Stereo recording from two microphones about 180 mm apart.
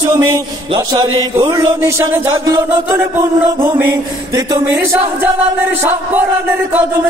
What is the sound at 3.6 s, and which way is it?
Chant, 15° right (ahead or behind).